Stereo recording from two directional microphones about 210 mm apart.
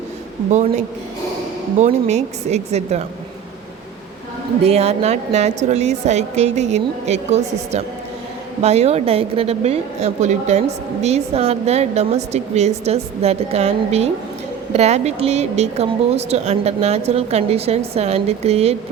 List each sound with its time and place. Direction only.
1.8 s a woman's voice: 30° right (ahead or behind)
4.6 s a woman's voice: 30° right (ahead or behind)
8.6 s a woman's voice: 30° right (ahead or behind)